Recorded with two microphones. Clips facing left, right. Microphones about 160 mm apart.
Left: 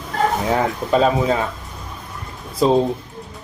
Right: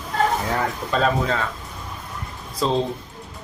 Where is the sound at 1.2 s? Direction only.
15° left (ahead or behind).